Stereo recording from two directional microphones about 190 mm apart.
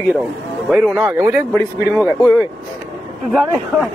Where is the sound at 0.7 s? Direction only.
5° right (ahead or behind).